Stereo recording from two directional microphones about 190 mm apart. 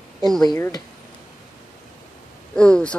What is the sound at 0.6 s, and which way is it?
Speech, 15° left (ahead or behind).